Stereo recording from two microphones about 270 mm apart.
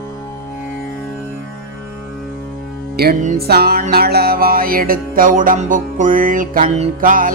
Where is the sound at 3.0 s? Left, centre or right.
Right.